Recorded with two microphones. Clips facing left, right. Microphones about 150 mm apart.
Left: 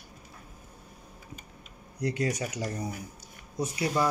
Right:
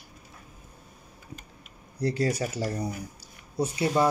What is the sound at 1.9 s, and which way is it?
Speech, 30° right (ahead or behind).